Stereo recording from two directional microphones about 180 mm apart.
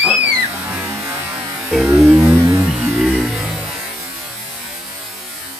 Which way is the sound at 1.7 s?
Centre (ahead or behind).